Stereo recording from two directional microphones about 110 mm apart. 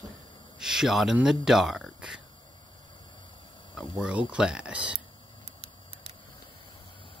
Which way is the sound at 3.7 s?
5° right (ahead or behind).